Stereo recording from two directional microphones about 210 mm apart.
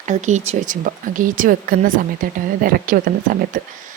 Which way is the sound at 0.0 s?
35° right (ahead or behind).